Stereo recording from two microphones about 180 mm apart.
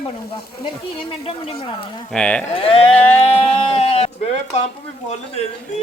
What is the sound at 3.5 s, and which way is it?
Speech, 35° left (ahead or behind).